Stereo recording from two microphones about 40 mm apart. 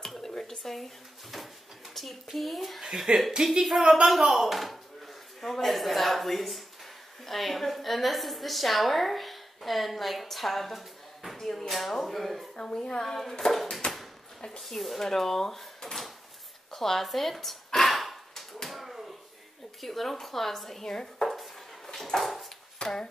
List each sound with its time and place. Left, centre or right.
0.0 s stir: centre
0.7 s drawer open or close: centre
2.3 s speech: centre
3.1 s a woman's voice: right
3.8 s a woman's voice: centre
11.3 s speech: centre
12.5 s speech: centre
13.5 s a sound: centre
14.6 s speech: centre
17.7 s a sound: centre
19.8 s speech: centre
21.3 s dishes: centre
21.9 s dog: centre
22.8 s speech: left